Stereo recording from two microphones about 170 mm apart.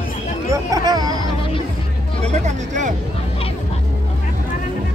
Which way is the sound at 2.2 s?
40° right (ahead or behind).